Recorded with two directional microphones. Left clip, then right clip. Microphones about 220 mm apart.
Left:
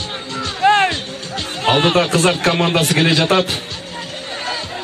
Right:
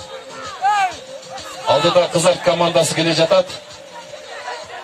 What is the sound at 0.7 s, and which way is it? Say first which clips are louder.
Music: left 3 dB; 45° right (ahead or behind).